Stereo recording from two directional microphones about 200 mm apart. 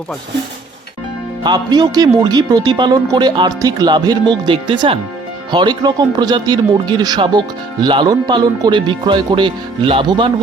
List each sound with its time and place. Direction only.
1.5 s speech: 20° right (ahead or behind)